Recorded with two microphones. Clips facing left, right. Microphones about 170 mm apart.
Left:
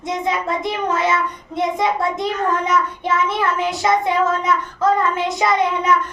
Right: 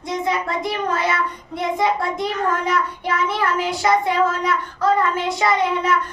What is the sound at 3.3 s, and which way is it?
Child singing, 20° left (ahead or behind).